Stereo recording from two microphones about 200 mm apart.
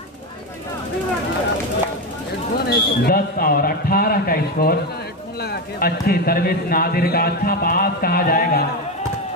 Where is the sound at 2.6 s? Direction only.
50° left (ahead or behind).